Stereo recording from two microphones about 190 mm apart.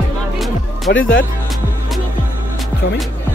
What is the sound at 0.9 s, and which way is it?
Speech, 60° left (ahead or behind).